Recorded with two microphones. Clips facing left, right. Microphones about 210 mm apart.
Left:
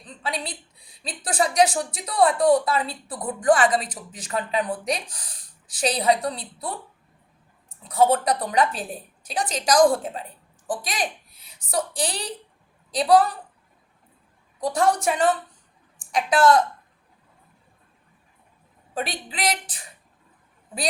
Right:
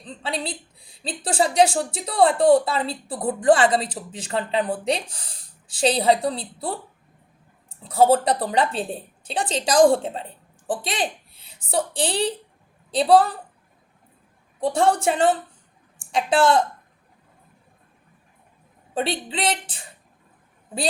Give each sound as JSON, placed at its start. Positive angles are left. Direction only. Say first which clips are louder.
{"t": 0.0, "sound": "a woman's voice", "louder": "right 2 dB", "side_deg": -30}
{"t": 7.9, "sound": "a woman's voice", "louder": "right 2 dB", "side_deg": -30}
{"t": 14.6, "sound": "a woman's voice", "louder": "right 2 dB", "side_deg": -25}
{"t": 18.9, "sound": "a woman's voice", "louder": "right 5 dB", "side_deg": -25}